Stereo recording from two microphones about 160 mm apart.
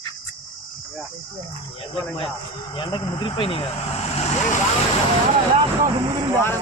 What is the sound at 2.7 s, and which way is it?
Speech, 30° left (ahead or behind).